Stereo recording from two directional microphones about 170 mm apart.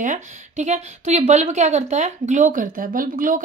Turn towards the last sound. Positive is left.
turn(degrees=-55)  # may be behind; listen again after turning